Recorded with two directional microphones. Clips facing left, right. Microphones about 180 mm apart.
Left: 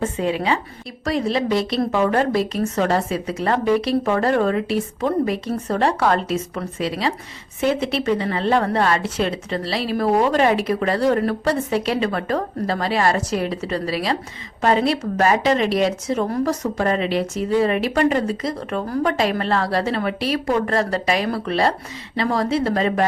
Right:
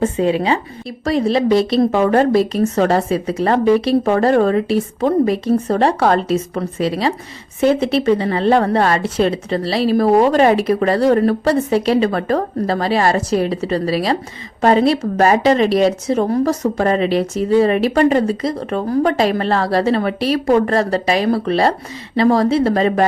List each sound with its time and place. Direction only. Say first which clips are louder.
0.0 s a woman's voice: right 6 dB; 30° right (ahead or behind)